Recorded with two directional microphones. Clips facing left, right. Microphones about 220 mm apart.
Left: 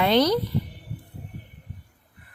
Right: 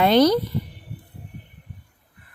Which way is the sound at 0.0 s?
45° right (ahead or behind).